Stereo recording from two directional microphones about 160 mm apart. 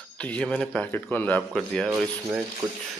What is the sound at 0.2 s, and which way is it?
A man's voice, 10° left (ahead or behind).